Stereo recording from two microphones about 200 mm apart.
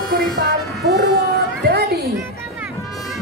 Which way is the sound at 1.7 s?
50° right (ahead or behind).